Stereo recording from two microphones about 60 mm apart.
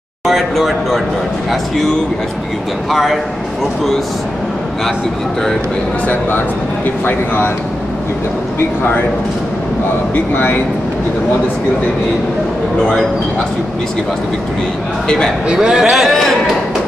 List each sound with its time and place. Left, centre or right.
0.3 s a man's voice: centre
2.9 s a man's voice: centre
7.1 s speech: left
8.5 s speech: left
10.1 s speech: left
15.0 s a man's voice: centre
15.4 s a man's voice: centre